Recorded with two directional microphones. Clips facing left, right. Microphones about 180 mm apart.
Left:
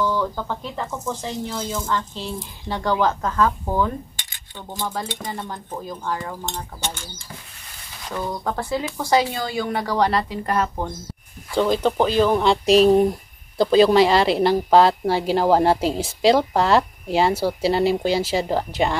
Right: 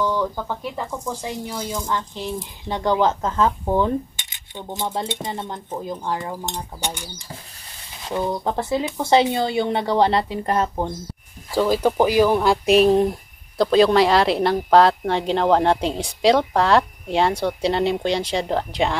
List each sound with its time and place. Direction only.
0.0 s speech: 15° right (ahead or behind)
11.5 s a woman's voice: 5° right (ahead or behind)